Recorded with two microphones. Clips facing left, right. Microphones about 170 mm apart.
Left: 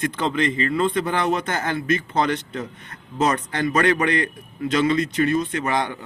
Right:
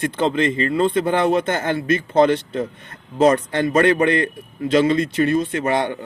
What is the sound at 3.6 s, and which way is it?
A man's voice, 30° right (ahead or behind).